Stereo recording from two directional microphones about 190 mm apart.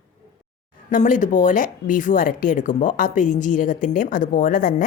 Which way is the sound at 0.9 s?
45° left (ahead or behind).